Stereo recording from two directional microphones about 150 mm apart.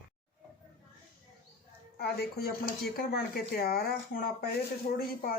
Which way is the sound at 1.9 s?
90° left.